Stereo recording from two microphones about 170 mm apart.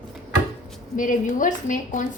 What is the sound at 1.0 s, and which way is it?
A woman's voice, 50° left (ahead or behind).